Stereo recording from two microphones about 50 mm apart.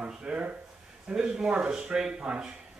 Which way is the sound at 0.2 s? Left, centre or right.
Centre.